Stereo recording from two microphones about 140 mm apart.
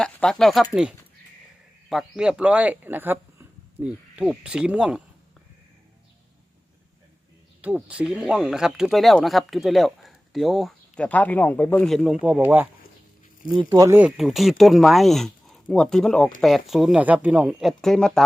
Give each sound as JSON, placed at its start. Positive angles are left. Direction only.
{"t": 0.0, "sound": "speech", "side_deg": 5}
{"t": 7.6, "sound": "speech", "side_deg": -10}
{"t": 12.2, "sound": "speech", "side_deg": -10}
{"t": 13.6, "sound": "speech", "side_deg": -25}
{"t": 14.0, "sound": "speech", "side_deg": 0}